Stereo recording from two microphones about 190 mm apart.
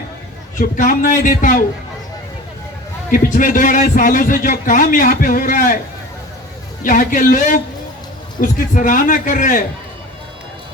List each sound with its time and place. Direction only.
0.6 s a man's voice: 45° left (ahead or behind)
3.1 s a man's voice: 45° left (ahead or behind)
6.8 s a man's voice: 45° left (ahead or behind)